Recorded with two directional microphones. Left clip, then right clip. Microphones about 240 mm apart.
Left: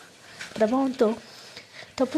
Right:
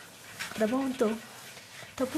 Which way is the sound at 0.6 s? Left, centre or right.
Centre.